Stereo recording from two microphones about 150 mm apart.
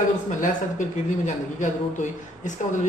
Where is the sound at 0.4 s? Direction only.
55° left (ahead or behind).